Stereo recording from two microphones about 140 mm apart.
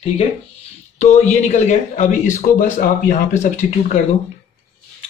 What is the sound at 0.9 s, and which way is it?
Speech, 55° left (ahead or behind).